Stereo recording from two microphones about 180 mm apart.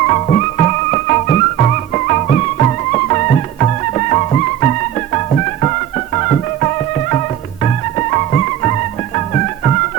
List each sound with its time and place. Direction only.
0.1 s music: 35° left (ahead or behind)